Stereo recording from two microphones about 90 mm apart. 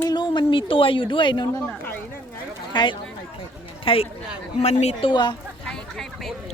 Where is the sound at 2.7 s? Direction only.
60° left (ahead or behind).